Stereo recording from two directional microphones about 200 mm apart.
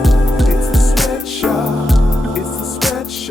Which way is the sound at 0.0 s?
Centre (ahead or behind).